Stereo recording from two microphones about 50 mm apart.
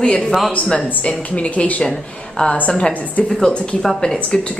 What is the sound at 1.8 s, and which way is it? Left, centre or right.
Speech, centre.